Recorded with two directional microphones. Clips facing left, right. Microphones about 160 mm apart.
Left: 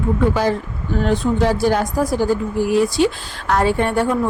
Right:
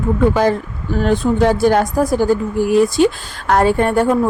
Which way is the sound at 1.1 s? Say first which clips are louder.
Right 4 dB; 50° right (ahead or behind).